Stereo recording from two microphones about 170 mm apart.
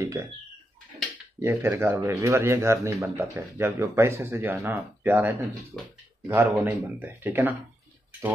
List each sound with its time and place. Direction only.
0.0 s speech: 15° right (ahead or behind)
1.4 s speech: 15° right (ahead or behind)